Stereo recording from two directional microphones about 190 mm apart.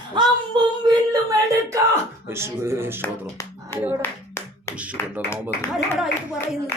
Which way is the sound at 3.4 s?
15° left (ahead or behind).